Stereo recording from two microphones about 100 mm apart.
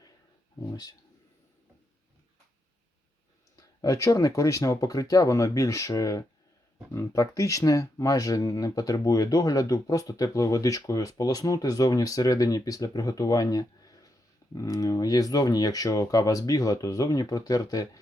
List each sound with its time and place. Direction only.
0.7 s speech: 40° left (ahead or behind)
3.8 s speech: 35° left (ahead or behind)